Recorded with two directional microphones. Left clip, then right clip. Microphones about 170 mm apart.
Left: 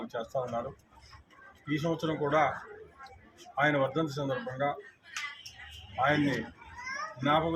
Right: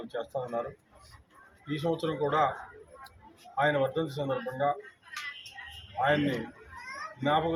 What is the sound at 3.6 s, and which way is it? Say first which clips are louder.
Speech: right 1 dB; 5° left (ahead or behind).